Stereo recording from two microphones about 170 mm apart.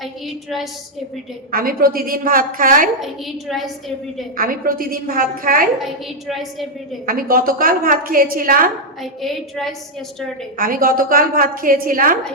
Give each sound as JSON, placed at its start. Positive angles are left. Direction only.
{"t": 1.5, "sound": "a woman's voice", "side_deg": -60}
{"t": 3.0, "sound": "a woman's voice", "side_deg": 0}
{"t": 4.4, "sound": "a woman's voice", "side_deg": -55}
{"t": 5.8, "sound": "a woman's voice", "side_deg": 0}
{"t": 7.0, "sound": "a woman's voice", "side_deg": -55}
{"t": 9.0, "sound": "a woman's voice", "side_deg": 0}
{"t": 10.6, "sound": "a woman's voice", "side_deg": -55}